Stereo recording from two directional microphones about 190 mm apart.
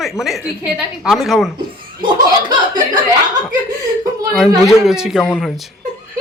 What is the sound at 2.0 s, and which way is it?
Speech, 25° right (ahead or behind).